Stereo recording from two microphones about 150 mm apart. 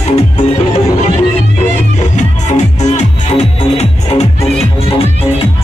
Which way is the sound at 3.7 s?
45° left (ahead or behind).